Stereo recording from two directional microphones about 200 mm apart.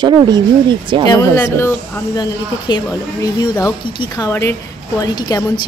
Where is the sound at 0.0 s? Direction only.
25° right (ahead or behind).